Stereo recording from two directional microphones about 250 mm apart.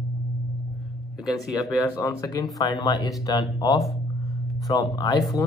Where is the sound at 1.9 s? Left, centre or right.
Centre.